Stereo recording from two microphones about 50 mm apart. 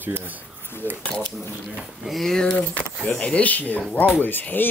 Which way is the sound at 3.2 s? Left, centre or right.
Left.